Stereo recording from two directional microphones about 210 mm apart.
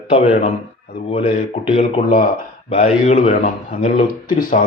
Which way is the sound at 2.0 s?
40° left (ahead or behind).